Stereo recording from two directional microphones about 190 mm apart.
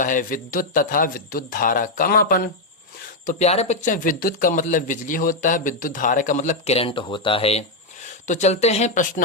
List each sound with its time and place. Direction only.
0.0 s speech: 45° left (ahead or behind)
3.2 s speech: 35° left (ahead or behind)